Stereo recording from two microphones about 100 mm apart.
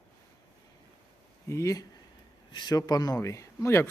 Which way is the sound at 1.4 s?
30° left (ahead or behind).